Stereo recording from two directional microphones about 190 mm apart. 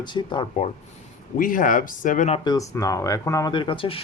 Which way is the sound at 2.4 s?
20° left (ahead or behind).